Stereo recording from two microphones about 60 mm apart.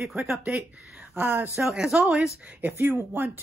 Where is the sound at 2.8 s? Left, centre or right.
Right.